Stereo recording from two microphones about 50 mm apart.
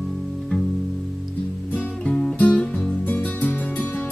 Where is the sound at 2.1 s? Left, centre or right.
Centre.